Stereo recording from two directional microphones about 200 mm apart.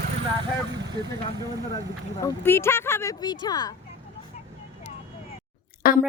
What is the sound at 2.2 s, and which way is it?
Speech, 15° left (ahead or behind).